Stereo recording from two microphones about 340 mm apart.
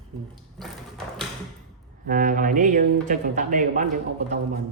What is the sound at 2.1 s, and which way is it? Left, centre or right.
Speech, right.